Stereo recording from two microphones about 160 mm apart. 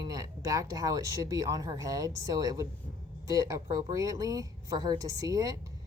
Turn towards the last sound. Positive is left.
turn(degrees=-20)  # may be behind; listen again after turning